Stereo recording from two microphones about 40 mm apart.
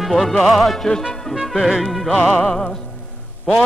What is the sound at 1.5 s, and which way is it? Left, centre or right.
Speech, centre.